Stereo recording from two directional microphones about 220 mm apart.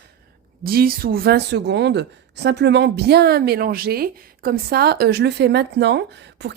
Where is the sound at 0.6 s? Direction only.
40° right (ahead or behind).